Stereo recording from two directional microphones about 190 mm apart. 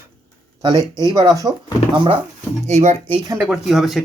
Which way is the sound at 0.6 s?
20° right (ahead or behind).